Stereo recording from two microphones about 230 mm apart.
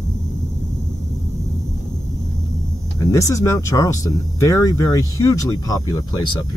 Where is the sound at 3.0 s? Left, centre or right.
Centre.